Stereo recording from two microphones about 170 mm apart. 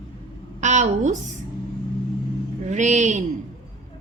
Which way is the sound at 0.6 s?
45° right (ahead or behind).